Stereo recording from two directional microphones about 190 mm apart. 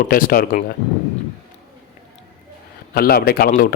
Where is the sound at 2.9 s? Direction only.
55° left (ahead or behind).